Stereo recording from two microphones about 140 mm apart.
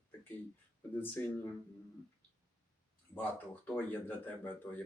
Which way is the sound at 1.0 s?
15° left (ahead or behind).